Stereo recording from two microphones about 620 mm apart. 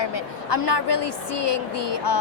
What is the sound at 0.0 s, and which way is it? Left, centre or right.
A woman's voice, left.